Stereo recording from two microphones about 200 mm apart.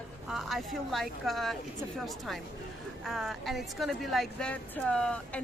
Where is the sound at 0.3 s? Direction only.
Centre (ahead or behind).